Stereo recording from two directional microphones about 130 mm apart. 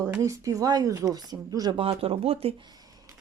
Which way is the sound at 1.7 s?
45° right (ahead or behind).